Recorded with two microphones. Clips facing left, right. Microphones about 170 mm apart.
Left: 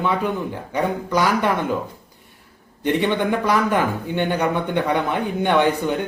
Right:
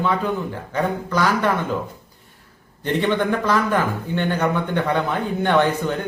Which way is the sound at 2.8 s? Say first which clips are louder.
Left 1 dB; 15° left (ahead or behind).